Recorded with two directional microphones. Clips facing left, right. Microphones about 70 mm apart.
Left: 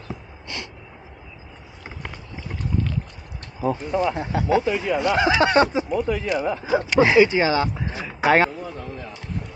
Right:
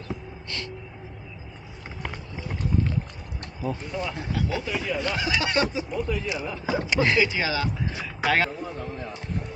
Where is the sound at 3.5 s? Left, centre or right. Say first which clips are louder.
Left 8 dB; left.